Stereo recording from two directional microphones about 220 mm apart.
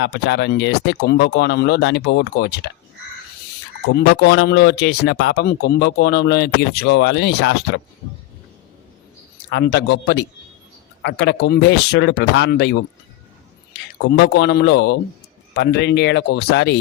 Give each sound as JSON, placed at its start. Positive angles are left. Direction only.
{"t": 0.0, "sound": "speech", "side_deg": 50}
{"t": 3.8, "sound": "speech", "side_deg": 50}
{"t": 9.5, "sound": "speech", "side_deg": 50}
{"t": 14.1, "sound": "speech", "side_deg": 50}